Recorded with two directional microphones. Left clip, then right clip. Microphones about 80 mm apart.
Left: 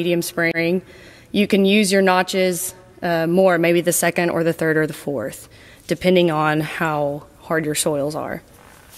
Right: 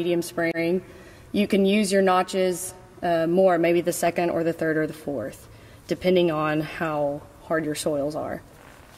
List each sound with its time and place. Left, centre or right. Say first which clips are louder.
0.0 s a woman's voice: left 5 dB; left